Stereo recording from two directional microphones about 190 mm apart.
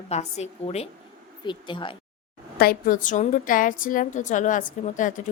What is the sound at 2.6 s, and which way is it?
A woman's voice, 50° left (ahead or behind).